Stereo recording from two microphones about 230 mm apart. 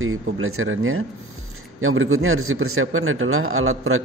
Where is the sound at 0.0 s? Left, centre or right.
Right.